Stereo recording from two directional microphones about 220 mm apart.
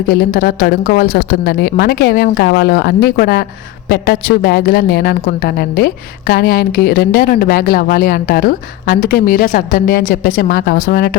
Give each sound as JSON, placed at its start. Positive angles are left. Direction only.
{"t": 0.1, "sound": "a woman's voice", "side_deg": 40}